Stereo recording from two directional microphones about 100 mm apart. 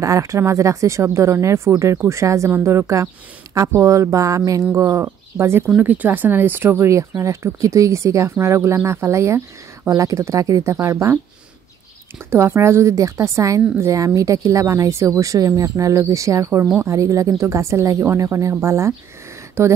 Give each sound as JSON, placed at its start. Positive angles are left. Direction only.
{"t": 0.0, "sound": "a woman's voice", "side_deg": -30}
{"t": 12.3, "sound": "a woman's voice", "side_deg": -25}